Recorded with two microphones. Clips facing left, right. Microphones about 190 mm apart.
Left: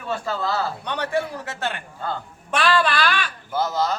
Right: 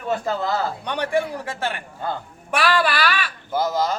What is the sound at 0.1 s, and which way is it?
A man's voice, 20° right (ahead or behind).